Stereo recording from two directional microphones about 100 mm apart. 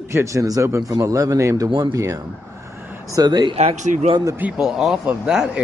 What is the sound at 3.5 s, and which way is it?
Speech, 90° right.